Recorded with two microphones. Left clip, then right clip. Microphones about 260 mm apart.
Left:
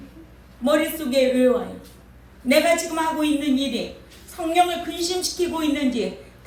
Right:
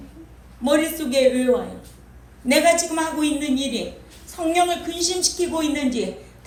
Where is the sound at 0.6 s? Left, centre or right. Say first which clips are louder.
Right 1 dB; right.